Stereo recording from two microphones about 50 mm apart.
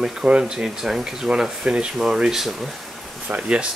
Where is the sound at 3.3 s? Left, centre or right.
Right.